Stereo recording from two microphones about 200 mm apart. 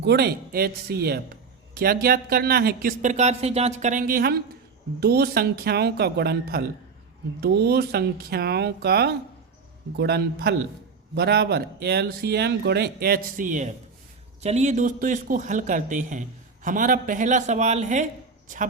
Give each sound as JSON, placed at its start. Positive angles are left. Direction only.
{"t": 0.0, "sound": "speech", "side_deg": -55}